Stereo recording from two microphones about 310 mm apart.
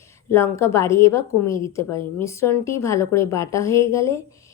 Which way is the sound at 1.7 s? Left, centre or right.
Centre.